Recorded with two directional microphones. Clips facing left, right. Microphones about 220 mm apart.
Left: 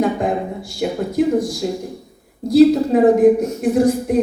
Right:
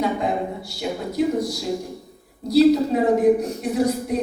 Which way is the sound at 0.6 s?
50° left (ahead or behind).